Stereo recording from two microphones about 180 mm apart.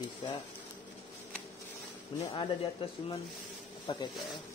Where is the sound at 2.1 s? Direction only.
30° left (ahead or behind).